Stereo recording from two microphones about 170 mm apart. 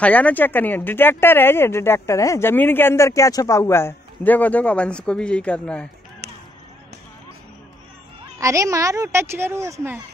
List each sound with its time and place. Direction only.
0.0 s speech: 10° left (ahead or behind)
8.4 s a woman's voice: 20° right (ahead or behind)